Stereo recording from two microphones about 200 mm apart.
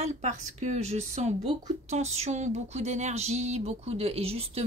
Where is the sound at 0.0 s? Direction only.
35° right (ahead or behind).